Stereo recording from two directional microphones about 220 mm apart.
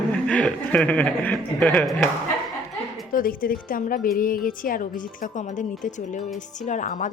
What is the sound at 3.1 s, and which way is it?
A woman's voice, 40° left (ahead or behind).